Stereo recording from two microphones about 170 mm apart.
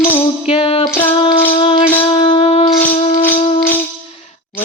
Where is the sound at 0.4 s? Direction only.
35° left (ahead or behind).